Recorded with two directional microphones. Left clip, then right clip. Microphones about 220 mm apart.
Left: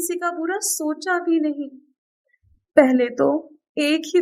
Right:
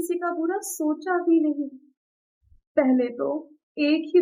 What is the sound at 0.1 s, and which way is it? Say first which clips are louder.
A woman's voice: left 3 dB; 40° left (ahead or behind).